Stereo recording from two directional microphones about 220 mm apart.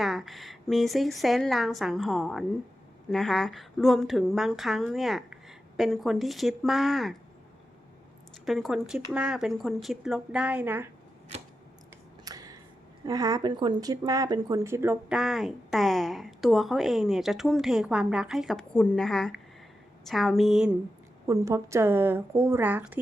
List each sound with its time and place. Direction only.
0.0 s speech: centre (ahead or behind)
8.4 s speech: centre (ahead or behind)
12.2 s a sound: 15° right (ahead or behind)
13.1 s speech: 15° right (ahead or behind)
21.2 s a woman's voice: 15° right (ahead or behind)